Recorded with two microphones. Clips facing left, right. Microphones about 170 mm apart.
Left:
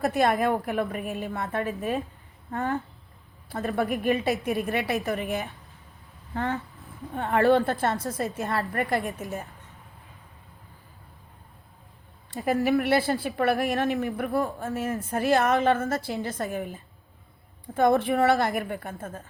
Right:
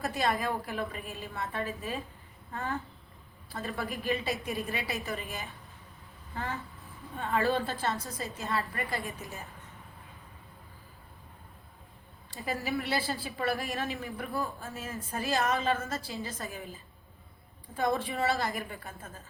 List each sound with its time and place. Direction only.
0.0 s a woman's voice: 55° left (ahead or behind)
0.3 s a woman's voice: 65° left (ahead or behind)
3.5 s a woman's voice: 50° left (ahead or behind); by 9.1 s 70° left (ahead or behind)
12.5 s a woman's voice: 65° left (ahead or behind)